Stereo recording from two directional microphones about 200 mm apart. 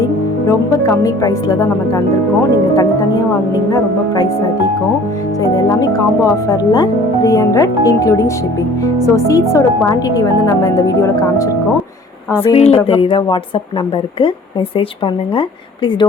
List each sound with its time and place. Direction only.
0.4 s speech: 15° left (ahead or behind)
5.4 s speech: 20° left (ahead or behind)
12.4 s speech: 30° left (ahead or behind)
14.8 s speech: 25° left (ahead or behind)